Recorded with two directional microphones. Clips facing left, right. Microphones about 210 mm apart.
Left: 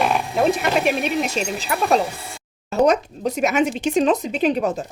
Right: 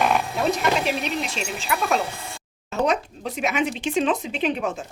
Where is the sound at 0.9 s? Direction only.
45° left (ahead or behind).